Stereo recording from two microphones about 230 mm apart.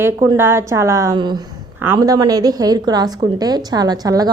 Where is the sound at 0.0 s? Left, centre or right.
Centre.